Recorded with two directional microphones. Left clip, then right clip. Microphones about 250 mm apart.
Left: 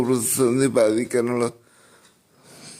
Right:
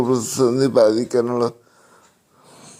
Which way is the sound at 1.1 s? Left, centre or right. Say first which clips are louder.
Right 3 dB; centre.